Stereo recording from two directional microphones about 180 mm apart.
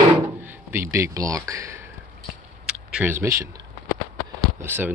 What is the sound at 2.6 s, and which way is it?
Speech, 5° right (ahead or behind).